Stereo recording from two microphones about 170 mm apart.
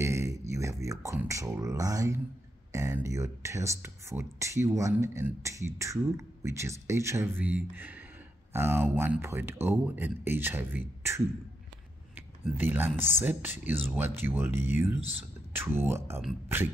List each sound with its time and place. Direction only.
0.0 s beatboxing: 15° right (ahead or behind)
2.7 s speech: 15° right (ahead or behind)
15.0 s speech: 35° right (ahead or behind)
15.5 s speech: 15° right (ahead or behind)